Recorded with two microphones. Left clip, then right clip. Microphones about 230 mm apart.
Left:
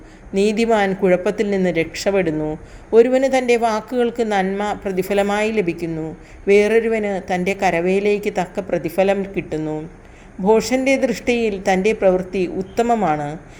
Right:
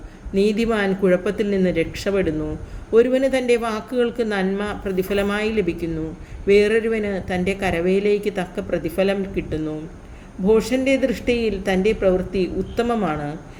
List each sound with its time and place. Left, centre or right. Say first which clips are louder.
0.4 s a woman's voice: left 4 dB; centre